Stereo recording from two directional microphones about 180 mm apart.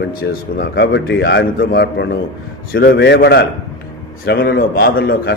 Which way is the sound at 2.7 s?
65° left (ahead or behind).